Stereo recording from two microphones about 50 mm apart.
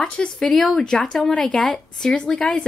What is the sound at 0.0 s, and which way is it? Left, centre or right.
Speech, centre.